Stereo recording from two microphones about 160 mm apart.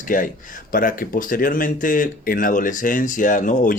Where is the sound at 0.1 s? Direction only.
55° left (ahead or behind).